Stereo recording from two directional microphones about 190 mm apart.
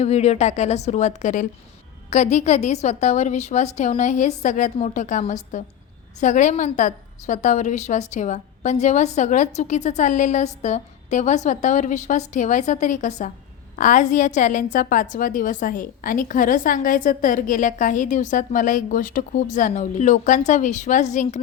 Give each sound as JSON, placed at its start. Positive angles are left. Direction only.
{"t": 0.0, "sound": "a woman's voice", "side_deg": 35}